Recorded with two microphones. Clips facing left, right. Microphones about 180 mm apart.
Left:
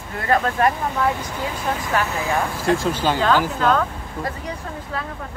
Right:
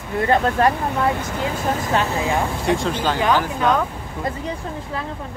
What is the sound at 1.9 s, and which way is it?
Speech, 25° right (ahead or behind).